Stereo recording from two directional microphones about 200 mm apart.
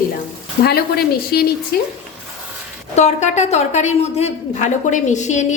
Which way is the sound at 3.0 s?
35° left (ahead or behind).